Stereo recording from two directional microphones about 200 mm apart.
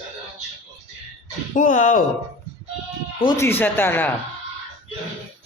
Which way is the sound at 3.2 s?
15° left (ahead or behind).